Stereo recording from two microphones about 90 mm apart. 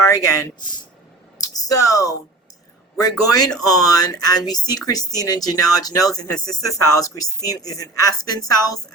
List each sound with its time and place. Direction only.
0.0 s speech: 35° left (ahead or behind)
1.4 s a sound: 45° left (ahead or behind)
3.0 s speech: 45° left (ahead or behind)